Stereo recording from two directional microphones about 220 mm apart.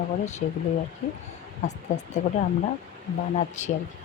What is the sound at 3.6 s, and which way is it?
Speech, 30° left (ahead or behind).